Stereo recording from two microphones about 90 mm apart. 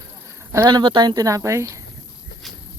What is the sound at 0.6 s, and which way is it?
Speech, 55° right (ahead or behind).